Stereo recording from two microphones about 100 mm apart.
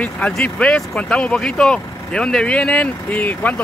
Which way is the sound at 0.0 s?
10° left (ahead or behind).